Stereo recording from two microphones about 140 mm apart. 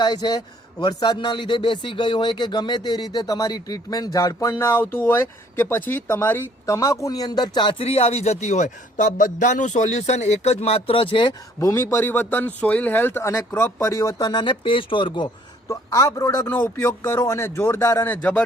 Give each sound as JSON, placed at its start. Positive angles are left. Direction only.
{"t": 0.0, "sound": "a man's voice", "side_deg": 30}
{"t": 11.6, "sound": "speech", "side_deg": 20}
{"t": 15.7, "sound": "speech", "side_deg": 20}